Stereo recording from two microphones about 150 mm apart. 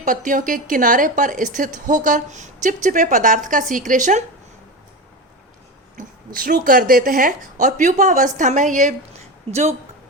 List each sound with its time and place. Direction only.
0.0 s a woman's voice: 60° right (ahead or behind)
6.0 s speech: 70° right (ahead or behind); by 9.7 s 45° right (ahead or behind)